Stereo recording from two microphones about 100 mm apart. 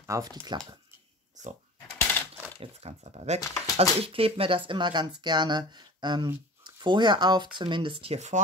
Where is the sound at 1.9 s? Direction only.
20° left (ahead or behind).